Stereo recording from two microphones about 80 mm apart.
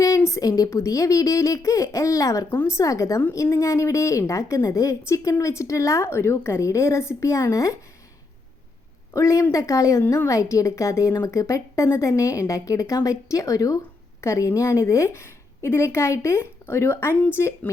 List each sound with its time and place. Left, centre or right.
0.0 s a woman's voice: left
9.1 s a woman's voice: left